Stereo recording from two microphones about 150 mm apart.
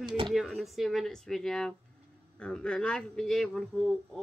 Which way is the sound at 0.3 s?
Centre (ahead or behind).